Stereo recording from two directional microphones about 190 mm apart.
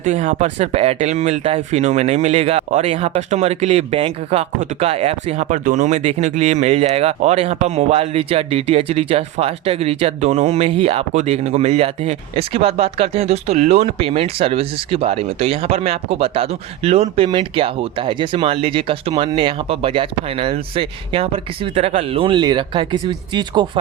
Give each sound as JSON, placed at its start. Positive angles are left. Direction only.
{"t": 0.0, "sound": "speech", "side_deg": -35}